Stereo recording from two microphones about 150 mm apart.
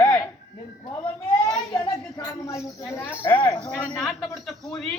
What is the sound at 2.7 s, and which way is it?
Speech, 15° left (ahead or behind).